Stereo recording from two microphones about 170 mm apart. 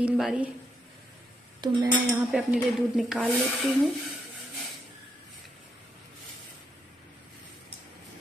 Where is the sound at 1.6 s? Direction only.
20° right (ahead or behind).